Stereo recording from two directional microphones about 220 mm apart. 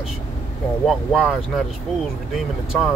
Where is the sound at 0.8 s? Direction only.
Centre (ahead or behind).